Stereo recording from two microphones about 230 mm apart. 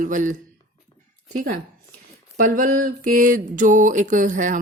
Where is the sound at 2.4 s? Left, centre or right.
Right.